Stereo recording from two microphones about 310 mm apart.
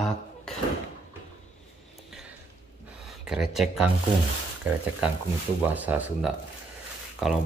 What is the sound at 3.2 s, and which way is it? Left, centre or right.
Speech, centre.